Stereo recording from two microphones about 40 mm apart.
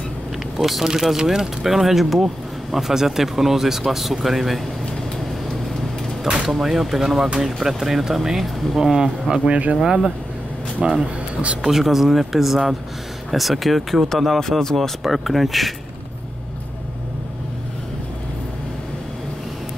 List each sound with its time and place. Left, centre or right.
0.6 s speech: centre
6.2 s speech: right
6.5 s speech: centre
9.5 s speech: right
9.8 s speech: centre
15.0 s speech: centre